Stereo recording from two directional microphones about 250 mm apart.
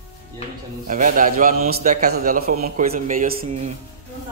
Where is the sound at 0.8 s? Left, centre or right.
Right.